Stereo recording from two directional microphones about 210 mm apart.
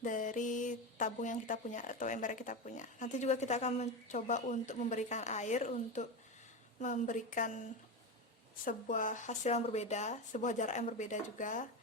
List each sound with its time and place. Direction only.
0.0 s speech: 40° left (ahead or behind)
8.6 s speech: 40° left (ahead or behind)